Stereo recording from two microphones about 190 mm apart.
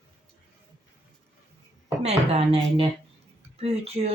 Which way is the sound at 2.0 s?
35° right (ahead or behind).